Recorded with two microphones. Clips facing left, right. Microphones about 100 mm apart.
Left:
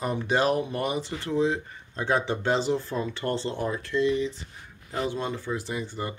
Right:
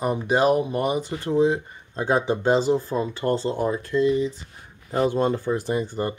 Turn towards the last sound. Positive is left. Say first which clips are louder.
# right 7 dB
turn(degrees=-45)  # may be behind; listen again after turning